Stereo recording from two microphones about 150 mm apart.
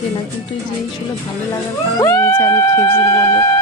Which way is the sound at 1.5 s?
20° left (ahead or behind).